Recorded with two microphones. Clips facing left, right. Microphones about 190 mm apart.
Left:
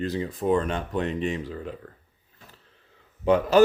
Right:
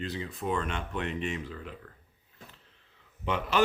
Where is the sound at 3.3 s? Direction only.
40° left (ahead or behind).